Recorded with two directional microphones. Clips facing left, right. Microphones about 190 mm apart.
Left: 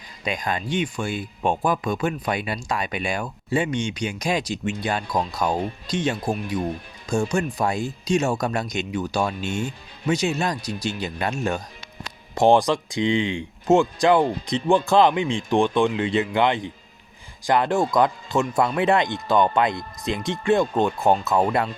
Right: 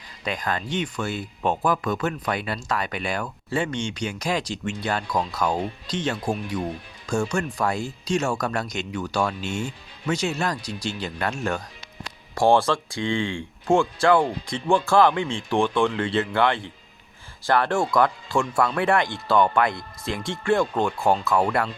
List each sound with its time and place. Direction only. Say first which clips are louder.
0.3 s speech: left 1 dB; 15° left (ahead or behind)
7.3 s speech: left 2 dB; 20° left (ahead or behind)